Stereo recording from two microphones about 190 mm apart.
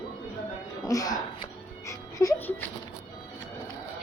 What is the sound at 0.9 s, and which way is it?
Speech, 20° left (ahead or behind).